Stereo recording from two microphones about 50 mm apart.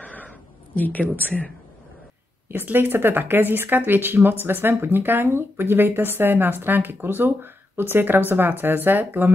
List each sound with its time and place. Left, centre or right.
0.0 s a sound: left
0.7 s speech: left
2.4 s speech: right